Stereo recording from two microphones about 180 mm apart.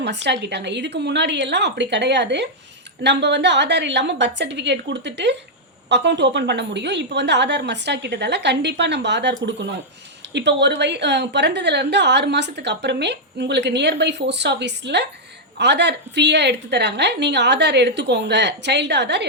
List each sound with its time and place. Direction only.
0.0 s a woman's voice: 75° right (ahead or behind)
10.3 s a woman's voice: 75° right (ahead or behind)